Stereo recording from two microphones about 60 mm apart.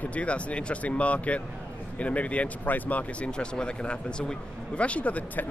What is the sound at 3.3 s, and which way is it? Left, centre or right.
Speech, centre.